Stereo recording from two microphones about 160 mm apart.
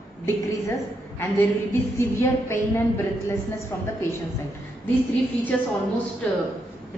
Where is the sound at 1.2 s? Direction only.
15° left (ahead or behind).